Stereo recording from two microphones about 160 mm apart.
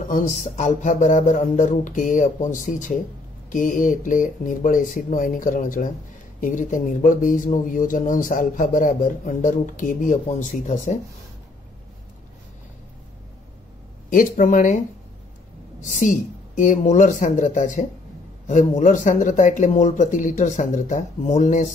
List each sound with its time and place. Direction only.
0.1 s speech: 50° left (ahead or behind)
14.1 s speech: 55° left (ahead or behind)
15.8 s speech: 55° left (ahead or behind)